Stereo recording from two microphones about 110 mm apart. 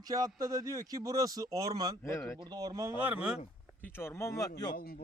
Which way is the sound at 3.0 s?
10° right (ahead or behind).